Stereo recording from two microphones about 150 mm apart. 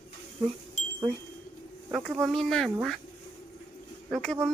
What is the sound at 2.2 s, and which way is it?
Speech, centre (ahead or behind).